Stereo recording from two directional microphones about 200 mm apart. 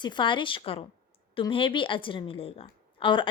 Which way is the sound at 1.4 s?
25° left (ahead or behind).